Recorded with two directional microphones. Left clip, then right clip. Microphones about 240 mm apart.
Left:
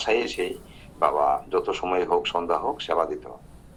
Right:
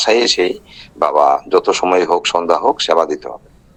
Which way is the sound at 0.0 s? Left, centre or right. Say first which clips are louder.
Right 12 dB; right.